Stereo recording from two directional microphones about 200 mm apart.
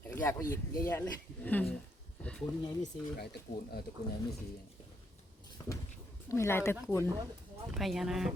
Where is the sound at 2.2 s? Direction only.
5° left (ahead or behind).